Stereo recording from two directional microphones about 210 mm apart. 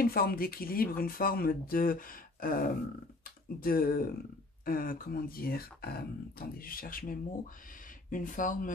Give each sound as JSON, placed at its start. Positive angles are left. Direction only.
{"t": 0.0, "sound": "speech", "side_deg": 45}